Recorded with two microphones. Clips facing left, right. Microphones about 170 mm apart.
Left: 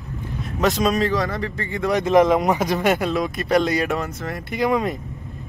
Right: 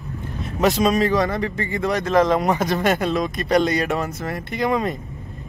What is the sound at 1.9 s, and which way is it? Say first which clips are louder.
Speech: left 3 dB; 20° left (ahead or behind).